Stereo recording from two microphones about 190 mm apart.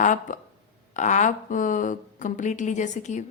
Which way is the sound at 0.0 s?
40° left (ahead or behind).